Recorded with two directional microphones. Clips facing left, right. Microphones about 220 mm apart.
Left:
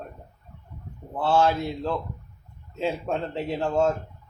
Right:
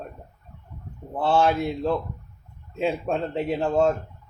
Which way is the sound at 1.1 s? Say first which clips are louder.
Right 1 dB; 20° right (ahead or behind).